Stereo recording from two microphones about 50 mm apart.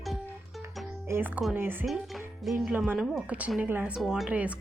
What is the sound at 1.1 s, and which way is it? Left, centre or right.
Speech, right.